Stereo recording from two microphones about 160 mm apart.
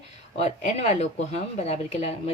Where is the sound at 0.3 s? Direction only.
40° left (ahead or behind).